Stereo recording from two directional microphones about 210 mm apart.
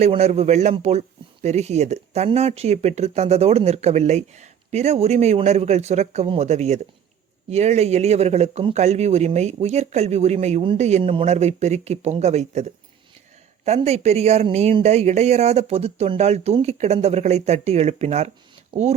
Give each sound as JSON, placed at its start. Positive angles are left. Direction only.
{"t": 0.0, "sound": "a man's voice", "side_deg": -30}